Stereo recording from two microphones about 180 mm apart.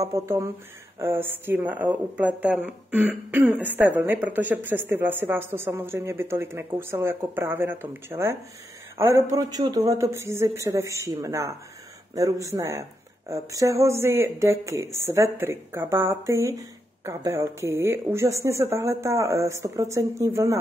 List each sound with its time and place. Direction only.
0.0 s speech: 15° right (ahead or behind)